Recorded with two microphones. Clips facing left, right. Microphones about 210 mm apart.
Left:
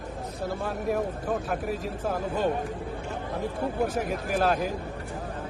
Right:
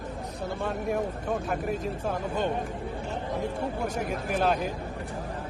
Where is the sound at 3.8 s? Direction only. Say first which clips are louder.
Left 1 dB; centre (ahead or behind).